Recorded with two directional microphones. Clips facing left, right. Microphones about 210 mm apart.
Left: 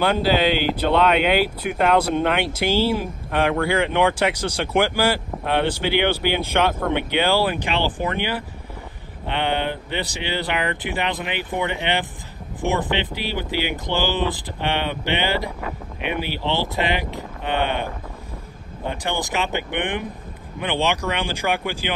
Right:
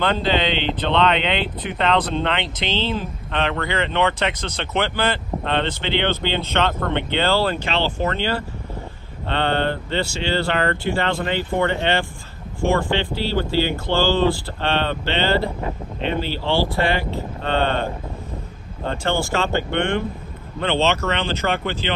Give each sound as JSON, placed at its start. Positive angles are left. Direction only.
{"t": 0.0, "sound": "speech", "side_deg": 10}
{"t": 18.9, "sound": "speech", "side_deg": 15}